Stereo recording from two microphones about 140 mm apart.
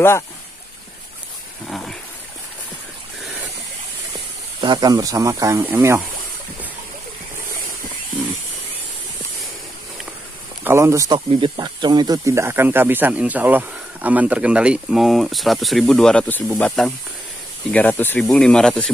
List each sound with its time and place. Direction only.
1.7 s a sound: centre (ahead or behind)
4.6 s speech: 35° right (ahead or behind); by 6.0 s 15° right (ahead or behind)
10.6 s speech: 20° right (ahead or behind)
11.1 s speech: 35° right (ahead or behind); by 18.9 s 5° left (ahead or behind)